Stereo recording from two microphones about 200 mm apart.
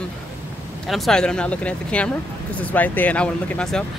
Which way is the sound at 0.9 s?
Centre (ahead or behind).